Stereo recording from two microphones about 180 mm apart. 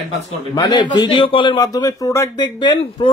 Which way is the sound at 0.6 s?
25° left (ahead or behind).